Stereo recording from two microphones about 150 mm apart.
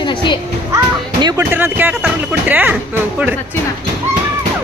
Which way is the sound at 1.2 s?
25° right (ahead or behind).